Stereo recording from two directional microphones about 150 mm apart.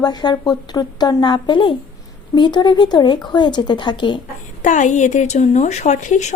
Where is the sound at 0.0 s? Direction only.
30° left (ahead or behind).